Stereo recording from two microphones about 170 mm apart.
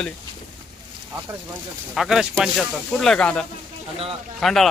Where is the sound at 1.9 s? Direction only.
Centre (ahead or behind).